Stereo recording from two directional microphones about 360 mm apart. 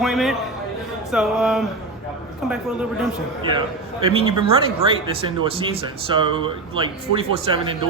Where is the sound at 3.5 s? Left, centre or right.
Centre.